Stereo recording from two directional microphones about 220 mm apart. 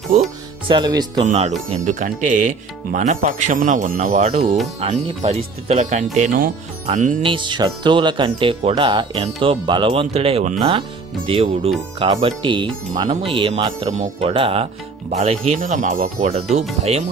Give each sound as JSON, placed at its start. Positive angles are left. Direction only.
{"t": 0.7, "sound": "speech", "side_deg": -20}
{"t": 1.2, "sound": "speech", "side_deg": -30}
{"t": 7.2, "sound": "speech", "side_deg": -20}